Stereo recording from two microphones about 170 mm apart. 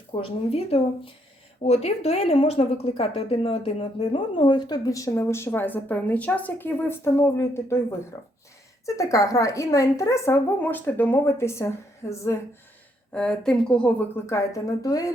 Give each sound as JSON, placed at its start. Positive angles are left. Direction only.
{"t": 0.1, "sound": "a woman's voice", "side_deg": 35}
{"t": 13.1, "sound": "a woman's voice", "side_deg": 5}